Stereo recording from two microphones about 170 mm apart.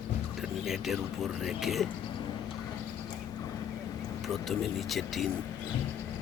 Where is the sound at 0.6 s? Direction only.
Centre (ahead or behind).